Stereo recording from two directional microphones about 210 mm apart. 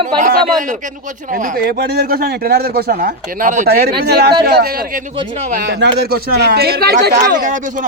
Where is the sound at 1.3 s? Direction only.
45° right (ahead or behind).